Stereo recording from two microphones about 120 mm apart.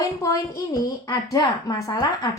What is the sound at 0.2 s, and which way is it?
A woman's voice, 25° left (ahead or behind).